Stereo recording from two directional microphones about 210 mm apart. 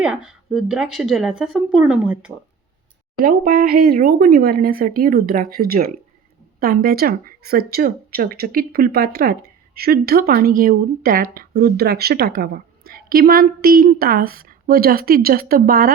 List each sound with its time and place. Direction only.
0.0 s speech: 5° right (ahead or behind)
3.2 s speech: 45° right (ahead or behind)